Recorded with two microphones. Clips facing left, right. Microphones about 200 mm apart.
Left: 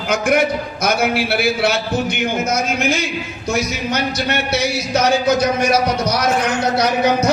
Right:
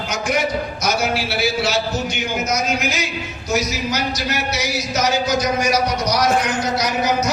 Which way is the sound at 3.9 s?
60° left (ahead or behind).